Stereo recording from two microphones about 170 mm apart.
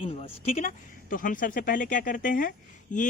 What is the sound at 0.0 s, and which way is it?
Speech, 35° left (ahead or behind).